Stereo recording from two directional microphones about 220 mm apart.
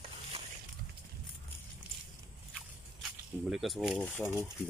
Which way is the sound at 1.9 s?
5° right (ahead or behind).